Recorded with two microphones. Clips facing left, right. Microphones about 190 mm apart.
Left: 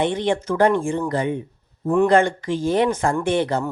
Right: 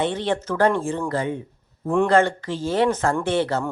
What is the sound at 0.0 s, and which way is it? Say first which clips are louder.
A woman's voice: left 2 dB; 15° left (ahead or behind).